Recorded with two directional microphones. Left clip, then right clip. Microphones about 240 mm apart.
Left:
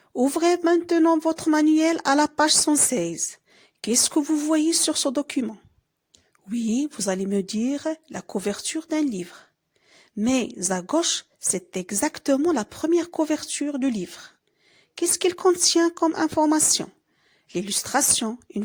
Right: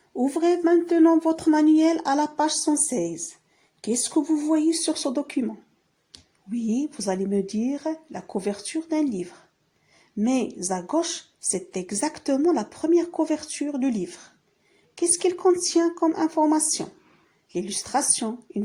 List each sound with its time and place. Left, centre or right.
0.2 s speech: left
15.3 s speech: left
17.9 s speech: left